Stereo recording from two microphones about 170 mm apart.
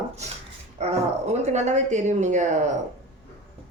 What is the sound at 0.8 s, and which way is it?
Speech, 40° right (ahead or behind).